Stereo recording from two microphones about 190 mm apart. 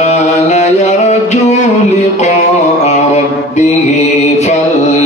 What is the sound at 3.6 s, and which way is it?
Mantra, 35° left (ahead or behind).